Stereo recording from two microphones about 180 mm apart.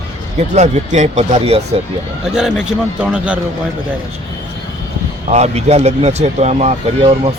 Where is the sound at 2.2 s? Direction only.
5° right (ahead or behind).